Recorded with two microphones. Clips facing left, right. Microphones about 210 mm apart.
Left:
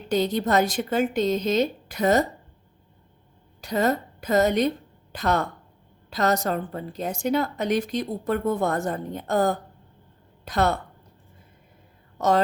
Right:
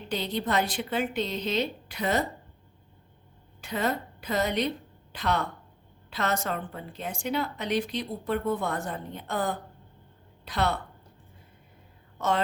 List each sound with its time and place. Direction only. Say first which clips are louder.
0.1 s a woman's voice: left 7 dB; 45° left (ahead or behind)
3.6 s a woman's voice: left 6 dB; 40° left (ahead or behind)
12.1 s whispering: left 6 dB; 40° left (ahead or behind)